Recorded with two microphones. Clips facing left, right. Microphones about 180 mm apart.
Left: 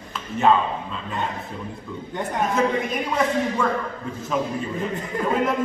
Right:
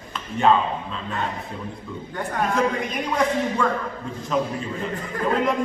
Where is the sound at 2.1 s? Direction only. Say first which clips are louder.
Left 2 dB; 20° left (ahead or behind).